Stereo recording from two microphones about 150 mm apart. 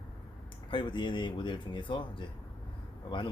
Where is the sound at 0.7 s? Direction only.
30° left (ahead or behind).